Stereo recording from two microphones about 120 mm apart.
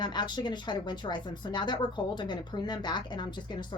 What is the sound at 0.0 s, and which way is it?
Speech, 40° left (ahead or behind).